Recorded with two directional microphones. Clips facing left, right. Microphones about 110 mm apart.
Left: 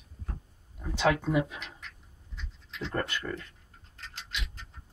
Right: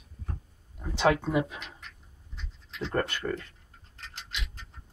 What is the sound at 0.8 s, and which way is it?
Speech, 15° right (ahead or behind).